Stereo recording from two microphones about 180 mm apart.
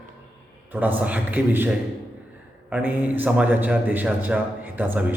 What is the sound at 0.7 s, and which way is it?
Speech, 10° right (ahead or behind).